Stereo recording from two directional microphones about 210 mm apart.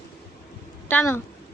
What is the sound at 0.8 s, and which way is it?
Speech, 10° left (ahead or behind).